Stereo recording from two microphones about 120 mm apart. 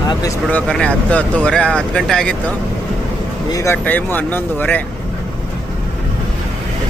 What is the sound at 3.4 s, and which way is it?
Speech, 30° left (ahead or behind).